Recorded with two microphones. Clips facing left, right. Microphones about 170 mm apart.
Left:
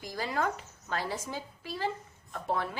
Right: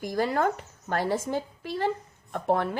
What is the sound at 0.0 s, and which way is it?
Speech, 55° right (ahead or behind).